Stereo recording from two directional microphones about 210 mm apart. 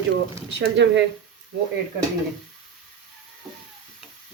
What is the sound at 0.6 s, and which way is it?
Speech, 55° right (ahead or behind).